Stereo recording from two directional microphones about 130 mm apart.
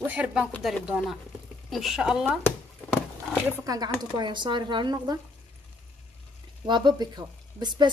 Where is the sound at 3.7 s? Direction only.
30° right (ahead or behind).